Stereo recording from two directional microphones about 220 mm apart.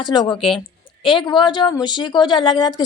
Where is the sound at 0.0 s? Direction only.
20° left (ahead or behind).